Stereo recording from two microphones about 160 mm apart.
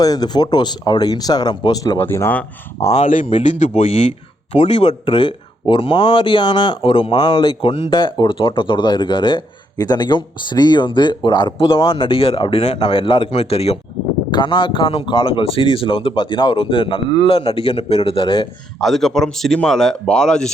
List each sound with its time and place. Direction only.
0.0 s speech: 25° left (ahead or behind)
2.0 s speech: 15° left (ahead or behind)
2.9 s speech: 50° left (ahead or behind); by 18.4 s 35° left (ahead or behind)
18.8 s a man's voice: centre (ahead or behind)